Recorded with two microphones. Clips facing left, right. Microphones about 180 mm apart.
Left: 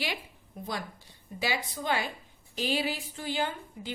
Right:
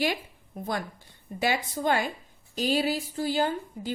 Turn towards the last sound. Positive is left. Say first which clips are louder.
# right 5 dB
turn(degrees=-40)  # may be behind; listen again after turning